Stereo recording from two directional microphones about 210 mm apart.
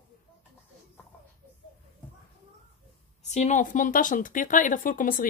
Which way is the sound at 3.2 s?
35° left (ahead or behind).